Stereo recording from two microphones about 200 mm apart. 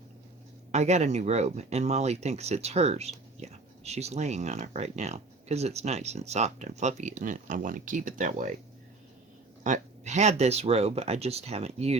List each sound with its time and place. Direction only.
0.7 s speech: 35° right (ahead or behind)
9.6 s speech: 35° right (ahead or behind)